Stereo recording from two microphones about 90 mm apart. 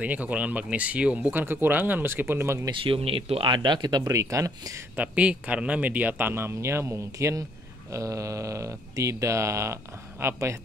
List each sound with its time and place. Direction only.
0.0 s speech: 15° right (ahead or behind)
2.7 s speech: 80° right; by 4.1 s 55° right (ahead or behind)
4.1 s speech: 35° right (ahead or behind)
4.9 s speech: 15° right (ahead or behind); by 10.6 s 35° right (ahead or behind)